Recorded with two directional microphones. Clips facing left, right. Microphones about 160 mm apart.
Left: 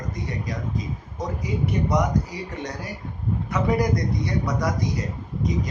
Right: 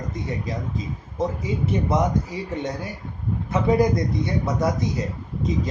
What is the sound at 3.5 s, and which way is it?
Speech, 25° right (ahead or behind).